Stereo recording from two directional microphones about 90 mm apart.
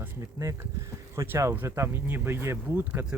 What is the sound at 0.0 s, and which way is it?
Speech, 30° right (ahead or behind).